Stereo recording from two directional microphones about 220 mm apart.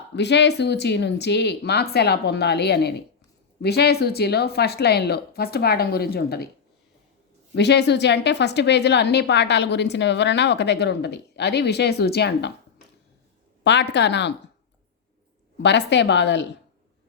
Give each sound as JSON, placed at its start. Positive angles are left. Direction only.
{"t": 0.2, "sound": "a woman's voice", "side_deg": 50}
{"t": 7.5, "sound": "a woman's voice", "side_deg": 50}
{"t": 13.7, "sound": "a woman's voice", "side_deg": 50}
{"t": 15.6, "sound": "a woman's voice", "side_deg": 50}